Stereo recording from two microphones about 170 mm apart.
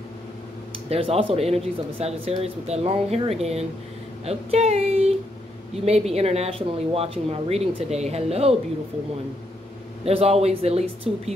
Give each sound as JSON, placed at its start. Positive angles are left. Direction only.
{"t": 0.8, "sound": "speech", "side_deg": -35}
{"t": 10.0, "sound": "speech", "side_deg": -35}